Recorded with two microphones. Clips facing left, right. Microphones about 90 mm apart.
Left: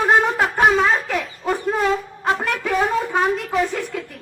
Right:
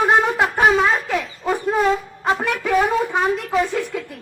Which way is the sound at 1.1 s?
15° right (ahead or behind).